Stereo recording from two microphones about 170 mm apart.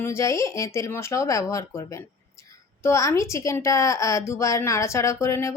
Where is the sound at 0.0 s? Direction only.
15° left (ahead or behind).